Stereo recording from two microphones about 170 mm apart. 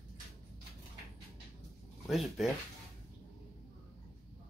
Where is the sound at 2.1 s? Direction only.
Centre (ahead or behind).